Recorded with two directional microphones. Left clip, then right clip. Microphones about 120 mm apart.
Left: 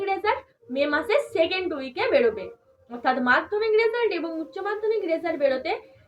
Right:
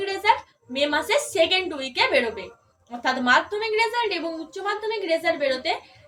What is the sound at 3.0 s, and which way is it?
A woman's voice, 40° right (ahead or behind).